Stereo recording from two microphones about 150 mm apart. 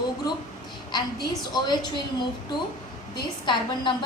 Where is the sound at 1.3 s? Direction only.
25° left (ahead or behind).